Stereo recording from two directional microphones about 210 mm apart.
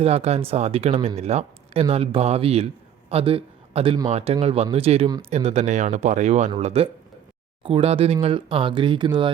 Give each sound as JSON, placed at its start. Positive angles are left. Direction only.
{"t": 0.0, "sound": "a man's voice", "side_deg": -30}